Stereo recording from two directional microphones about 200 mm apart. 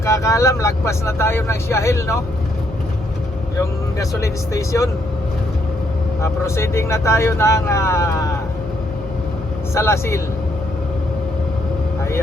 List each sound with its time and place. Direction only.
0.0 s speech: 15° left (ahead or behind)
4.2 s speech: 15° left (ahead or behind)
6.2 s speech: 15° left (ahead or behind)
9.7 s speech: 15° left (ahead or behind)